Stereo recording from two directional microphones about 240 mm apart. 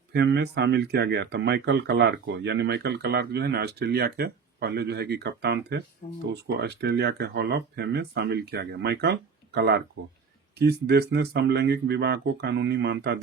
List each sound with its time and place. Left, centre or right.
0.1 s speech: right